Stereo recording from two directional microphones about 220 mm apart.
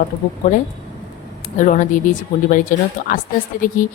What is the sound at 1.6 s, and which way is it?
A woman's voice, 35° left (ahead or behind).